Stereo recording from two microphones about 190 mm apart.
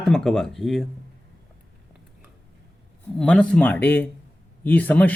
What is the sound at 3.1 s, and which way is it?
Speech, 5° left (ahead or behind).